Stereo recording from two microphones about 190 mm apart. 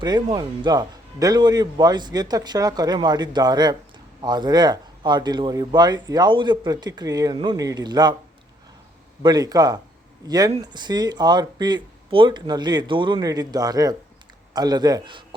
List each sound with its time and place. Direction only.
0.0 s speech: 20° right (ahead or behind)
9.2 s a man's voice: 20° right (ahead or behind)